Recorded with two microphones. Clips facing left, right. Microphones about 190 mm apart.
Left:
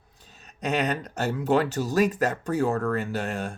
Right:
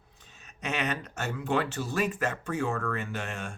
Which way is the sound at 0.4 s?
35° left (ahead or behind).